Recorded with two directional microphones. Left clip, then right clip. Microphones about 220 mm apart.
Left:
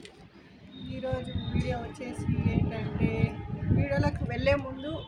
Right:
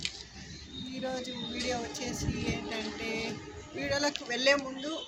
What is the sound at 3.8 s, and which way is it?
Speech, 5° left (ahead or behind).